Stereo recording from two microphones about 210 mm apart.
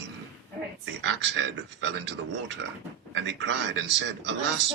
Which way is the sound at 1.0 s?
60° right (ahead or behind).